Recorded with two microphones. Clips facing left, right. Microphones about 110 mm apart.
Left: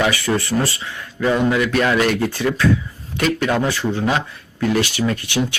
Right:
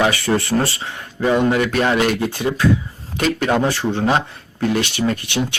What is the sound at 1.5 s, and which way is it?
Speech, 35° right (ahead or behind).